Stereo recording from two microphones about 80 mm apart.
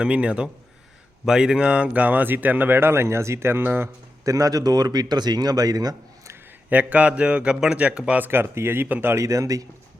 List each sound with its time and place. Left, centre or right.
0.0 s a man's voice: centre
4.3 s a man's voice: right
6.7 s a man's voice: centre
8.3 s speech: right
9.1 s a man's voice: right